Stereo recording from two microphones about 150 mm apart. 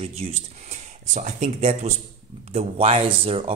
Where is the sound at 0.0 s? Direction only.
45° right (ahead or behind).